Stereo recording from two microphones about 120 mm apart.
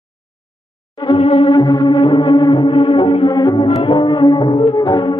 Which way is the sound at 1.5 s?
35° left (ahead or behind).